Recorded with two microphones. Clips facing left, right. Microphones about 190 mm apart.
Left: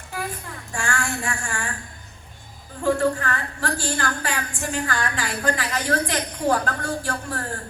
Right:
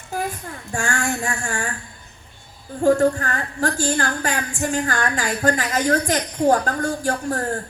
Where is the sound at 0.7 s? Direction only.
40° right (ahead or behind).